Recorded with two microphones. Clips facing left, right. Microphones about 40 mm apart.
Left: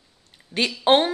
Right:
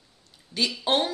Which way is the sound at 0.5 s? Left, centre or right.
Left.